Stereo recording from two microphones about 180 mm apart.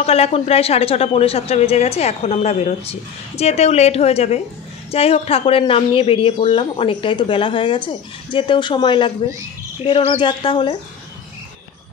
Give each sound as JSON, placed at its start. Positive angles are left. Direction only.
{"t": 0.0, "sound": "speech", "side_deg": 35}